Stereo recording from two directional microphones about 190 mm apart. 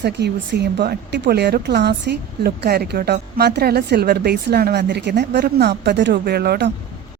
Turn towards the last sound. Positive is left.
turn(degrees=-60)  # may be behind; listen again after turning